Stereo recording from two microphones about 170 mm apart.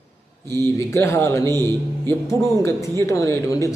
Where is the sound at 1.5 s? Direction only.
20° right (ahead or behind).